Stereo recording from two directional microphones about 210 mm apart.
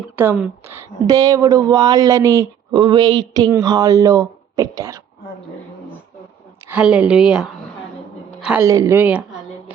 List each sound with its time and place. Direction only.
0.2 s speech: 5° right (ahead or behind)
6.7 s a man's voice: 5° right (ahead or behind)
8.6 s speech: 15° right (ahead or behind)